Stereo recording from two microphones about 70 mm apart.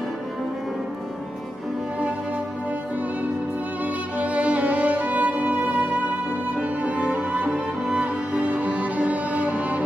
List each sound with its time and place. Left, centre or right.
3.8 s music: right